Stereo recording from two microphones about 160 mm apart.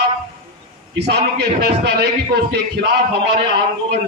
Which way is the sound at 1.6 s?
80° right.